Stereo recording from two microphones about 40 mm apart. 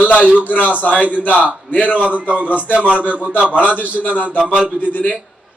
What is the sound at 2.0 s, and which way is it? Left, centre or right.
A man's voice, right.